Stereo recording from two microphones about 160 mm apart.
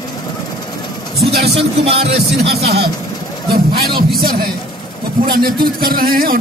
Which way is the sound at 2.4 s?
80° right.